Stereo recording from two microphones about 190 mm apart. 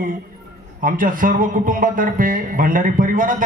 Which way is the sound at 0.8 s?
45° right (ahead or behind).